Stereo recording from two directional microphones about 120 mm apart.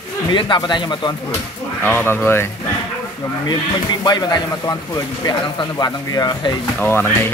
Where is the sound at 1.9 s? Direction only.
20° left (ahead or behind).